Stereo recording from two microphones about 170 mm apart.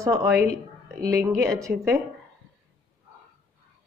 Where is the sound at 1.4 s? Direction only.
20° right (ahead or behind).